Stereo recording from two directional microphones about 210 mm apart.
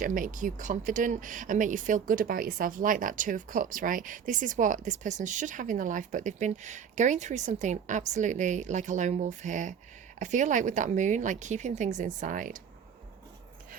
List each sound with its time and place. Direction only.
0.0 s speech: 40° right (ahead or behind)